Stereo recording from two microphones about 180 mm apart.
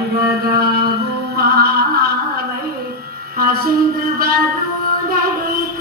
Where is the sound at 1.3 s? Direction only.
60° right (ahead or behind).